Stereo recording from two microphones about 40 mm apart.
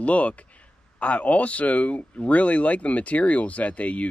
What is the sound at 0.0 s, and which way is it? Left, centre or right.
Speech, left.